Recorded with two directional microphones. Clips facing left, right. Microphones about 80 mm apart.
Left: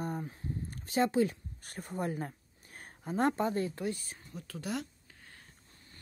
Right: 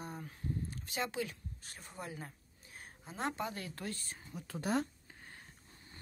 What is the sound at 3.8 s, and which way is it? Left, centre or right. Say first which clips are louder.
Speech: left 7 dB; centre.